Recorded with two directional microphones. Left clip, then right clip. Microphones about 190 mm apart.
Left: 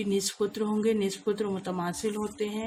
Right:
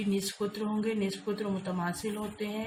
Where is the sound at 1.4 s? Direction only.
30° left (ahead or behind).